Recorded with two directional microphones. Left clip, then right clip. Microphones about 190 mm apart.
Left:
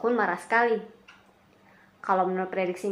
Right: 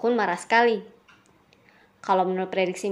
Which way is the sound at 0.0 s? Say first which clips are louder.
Right 2 dB; 45° right (ahead or behind).